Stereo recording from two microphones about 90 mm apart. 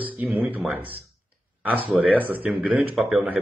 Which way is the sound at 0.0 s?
15° right (ahead or behind).